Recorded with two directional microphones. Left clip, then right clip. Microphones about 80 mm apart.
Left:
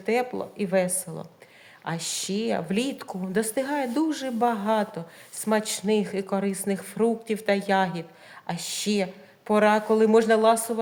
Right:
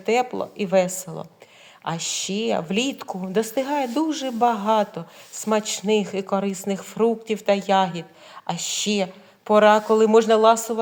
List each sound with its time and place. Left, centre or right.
0.0 s a woman's voice: right
1.8 s a woman's voice: centre
8.4 s speech: right